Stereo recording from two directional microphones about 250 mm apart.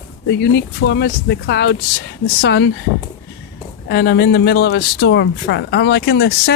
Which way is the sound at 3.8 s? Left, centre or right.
Left.